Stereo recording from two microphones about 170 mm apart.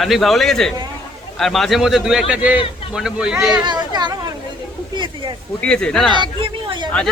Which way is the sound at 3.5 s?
25° right (ahead or behind).